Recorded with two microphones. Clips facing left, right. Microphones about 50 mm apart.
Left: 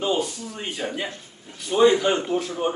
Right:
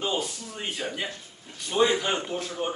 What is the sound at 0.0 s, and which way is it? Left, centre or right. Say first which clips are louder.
A man's voice: left 5 dB; centre.